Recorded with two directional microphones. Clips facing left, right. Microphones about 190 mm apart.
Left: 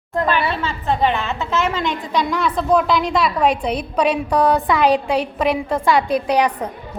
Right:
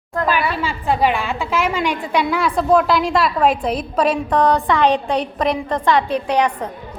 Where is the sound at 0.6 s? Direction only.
10° right (ahead or behind); by 6.4 s 15° left (ahead or behind).